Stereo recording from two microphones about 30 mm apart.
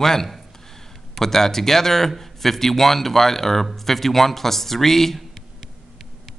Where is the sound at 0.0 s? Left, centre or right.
Centre.